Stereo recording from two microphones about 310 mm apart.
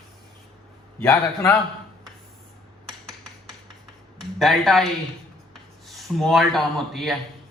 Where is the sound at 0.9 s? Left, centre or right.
Centre.